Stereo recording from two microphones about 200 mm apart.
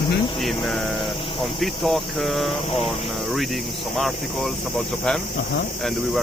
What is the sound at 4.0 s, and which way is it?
Speech, centre (ahead or behind).